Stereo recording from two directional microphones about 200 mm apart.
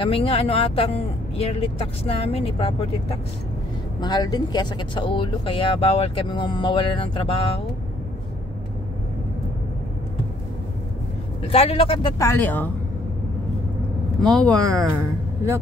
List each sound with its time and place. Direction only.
0.0 s speech: 30° left (ahead or behind)
11.4 s speech: 30° left (ahead or behind)
12.2 s speech: 10° left (ahead or behind)
14.2 s speech: 5° left (ahead or behind)